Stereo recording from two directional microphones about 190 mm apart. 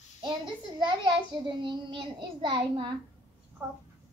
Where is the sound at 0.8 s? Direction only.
25° right (ahead or behind).